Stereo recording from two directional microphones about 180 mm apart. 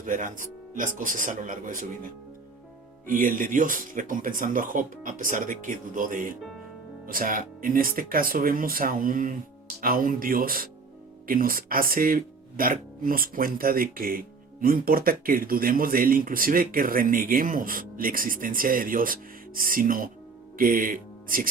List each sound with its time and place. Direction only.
0.0 s speech: 45° right (ahead or behind)
3.1 s speech: 50° right (ahead or behind)